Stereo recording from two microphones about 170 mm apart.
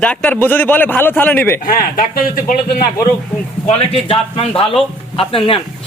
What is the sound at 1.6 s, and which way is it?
A man's voice, 55° left (ahead or behind).